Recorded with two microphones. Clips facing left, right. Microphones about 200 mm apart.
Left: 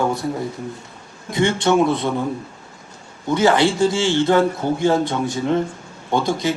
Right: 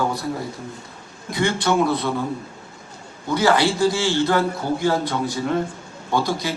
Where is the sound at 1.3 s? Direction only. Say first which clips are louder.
Left 3 dB; 25° left (ahead or behind).